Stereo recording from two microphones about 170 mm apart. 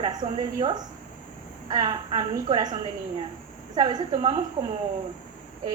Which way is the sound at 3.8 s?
25° right (ahead or behind).